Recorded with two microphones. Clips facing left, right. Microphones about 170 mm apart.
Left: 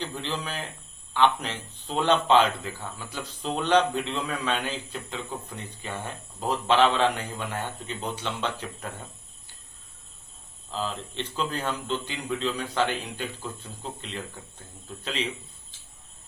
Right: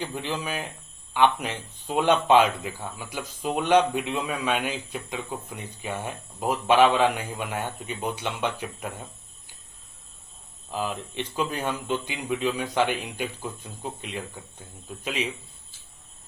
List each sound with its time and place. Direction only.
0.0 s speech: 10° right (ahead or behind)
10.7 s speech: 15° right (ahead or behind)